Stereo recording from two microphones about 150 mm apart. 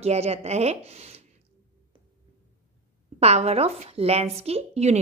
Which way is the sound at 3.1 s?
45° right (ahead or behind).